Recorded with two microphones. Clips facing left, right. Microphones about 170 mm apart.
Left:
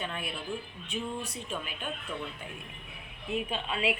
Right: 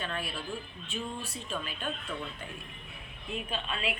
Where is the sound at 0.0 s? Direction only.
15° left (ahead or behind).